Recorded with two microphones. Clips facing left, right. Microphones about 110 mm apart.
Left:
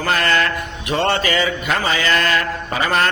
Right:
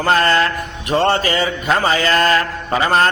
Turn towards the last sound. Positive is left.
turn(degrees=-35)  # may be behind; listen again after turning